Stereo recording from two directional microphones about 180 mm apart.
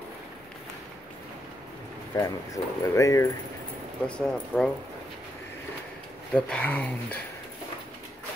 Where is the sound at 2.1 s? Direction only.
20° left (ahead or behind).